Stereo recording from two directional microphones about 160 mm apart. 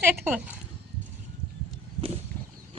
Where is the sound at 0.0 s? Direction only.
15° right (ahead or behind).